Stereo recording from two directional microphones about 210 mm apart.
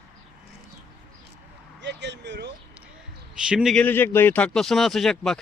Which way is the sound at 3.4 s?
Centre (ahead or behind).